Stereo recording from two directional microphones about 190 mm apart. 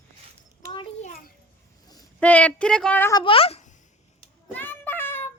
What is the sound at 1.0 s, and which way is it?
Speech, 35° left (ahead or behind).